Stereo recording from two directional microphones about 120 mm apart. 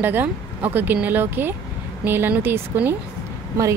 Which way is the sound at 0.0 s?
15° right (ahead or behind).